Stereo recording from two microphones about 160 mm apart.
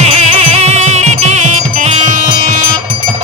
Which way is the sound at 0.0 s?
40° right (ahead or behind).